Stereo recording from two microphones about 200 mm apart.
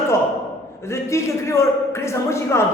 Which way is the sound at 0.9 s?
15° left (ahead or behind).